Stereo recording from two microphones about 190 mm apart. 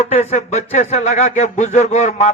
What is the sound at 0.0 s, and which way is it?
A man's voice, 35° left (ahead or behind).